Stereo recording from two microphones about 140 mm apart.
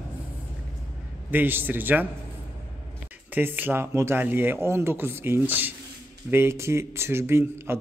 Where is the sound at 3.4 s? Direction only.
15° right (ahead or behind).